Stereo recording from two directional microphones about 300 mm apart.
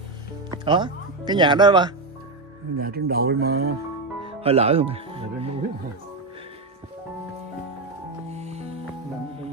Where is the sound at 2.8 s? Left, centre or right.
Right.